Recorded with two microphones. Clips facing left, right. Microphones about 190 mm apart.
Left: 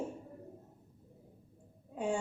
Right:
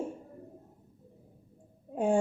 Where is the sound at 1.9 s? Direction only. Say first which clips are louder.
Right 8 dB; 50° right (ahead or behind).